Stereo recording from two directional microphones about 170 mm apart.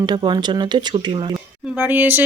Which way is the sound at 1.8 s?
10° right (ahead or behind).